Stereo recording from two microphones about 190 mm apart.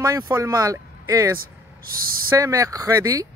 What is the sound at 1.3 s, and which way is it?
Vehicle, 50° right (ahead or behind).